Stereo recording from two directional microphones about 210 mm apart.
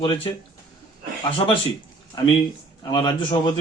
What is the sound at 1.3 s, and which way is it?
Speech, 25° left (ahead or behind).